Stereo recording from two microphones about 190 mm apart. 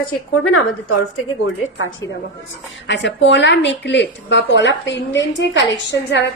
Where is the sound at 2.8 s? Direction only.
75° left (ahead or behind).